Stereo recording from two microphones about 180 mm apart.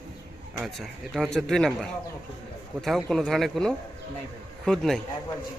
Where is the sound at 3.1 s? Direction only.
Centre (ahead or behind).